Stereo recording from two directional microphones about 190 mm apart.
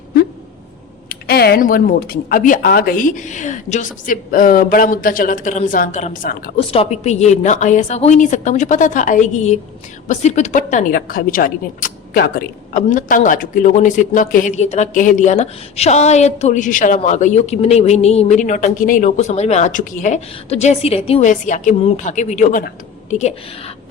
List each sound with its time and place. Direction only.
1.3 s a woman's voice: 55° left (ahead or behind)
6.6 s a woman's voice: 30° left (ahead or behind)